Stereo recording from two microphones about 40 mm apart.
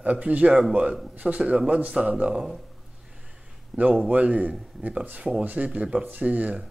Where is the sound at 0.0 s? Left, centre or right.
Right.